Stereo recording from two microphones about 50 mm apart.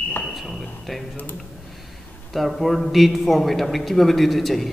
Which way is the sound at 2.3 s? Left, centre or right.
Centre.